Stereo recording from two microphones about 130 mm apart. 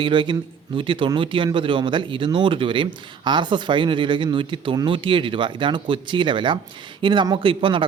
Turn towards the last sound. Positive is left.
turn(degrees=-40)  # may be behind; listen again after turning